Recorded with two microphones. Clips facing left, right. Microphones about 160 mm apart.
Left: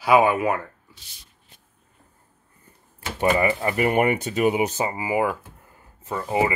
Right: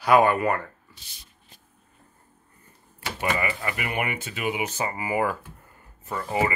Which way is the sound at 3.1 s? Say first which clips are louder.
Left 7 dB; 35° left (ahead or behind).